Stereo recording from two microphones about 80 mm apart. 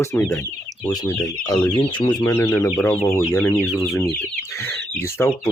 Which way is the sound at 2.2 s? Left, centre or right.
Left.